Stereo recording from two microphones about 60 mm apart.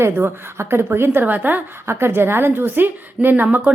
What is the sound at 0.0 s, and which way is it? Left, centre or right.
A woman's voice, right.